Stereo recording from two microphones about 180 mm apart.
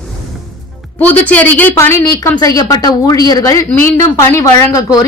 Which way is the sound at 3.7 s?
10° left (ahead or behind).